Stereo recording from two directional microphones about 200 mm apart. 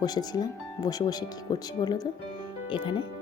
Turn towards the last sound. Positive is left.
turn(degrees=25)  # may be behind; listen again after turning